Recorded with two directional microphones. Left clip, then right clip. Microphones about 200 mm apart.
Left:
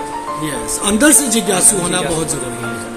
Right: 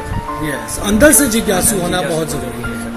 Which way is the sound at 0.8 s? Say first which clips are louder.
Right 3 dB; 5° right (ahead or behind).